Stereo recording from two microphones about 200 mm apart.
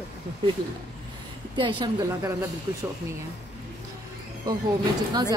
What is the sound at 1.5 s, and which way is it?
Speech, 25° right (ahead or behind).